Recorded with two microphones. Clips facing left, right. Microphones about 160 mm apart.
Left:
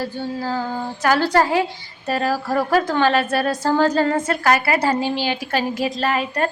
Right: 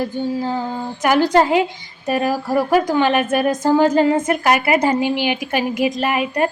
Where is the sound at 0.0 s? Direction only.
15° right (ahead or behind).